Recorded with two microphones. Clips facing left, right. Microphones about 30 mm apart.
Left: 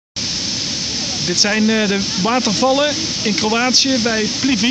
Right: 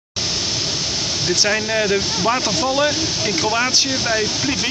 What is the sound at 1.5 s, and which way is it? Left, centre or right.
Speech, centre.